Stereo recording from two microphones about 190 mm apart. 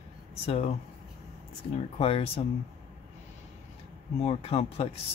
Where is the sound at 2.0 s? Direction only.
30° left (ahead or behind).